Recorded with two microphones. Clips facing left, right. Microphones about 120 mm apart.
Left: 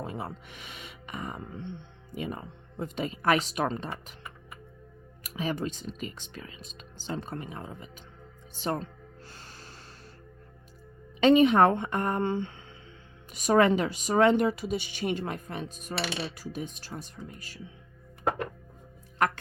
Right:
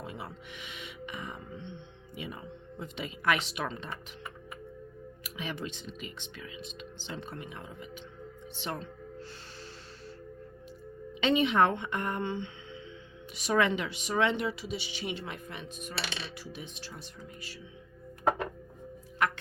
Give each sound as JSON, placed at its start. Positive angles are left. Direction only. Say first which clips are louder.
{"t": 0.0, "sound": "music", "louder": "left 5 dB", "side_deg": 40}
{"t": 2.1, "sound": "speech", "louder": "left 5 dB", "side_deg": 45}
{"t": 5.2, "sound": "speech", "louder": "left 7 dB", "side_deg": 40}
{"t": 11.2, "sound": "speech", "louder": "left 6 dB", "side_deg": 40}
{"t": 19.2, "sound": "speech", "louder": "left 3 dB", "side_deg": 45}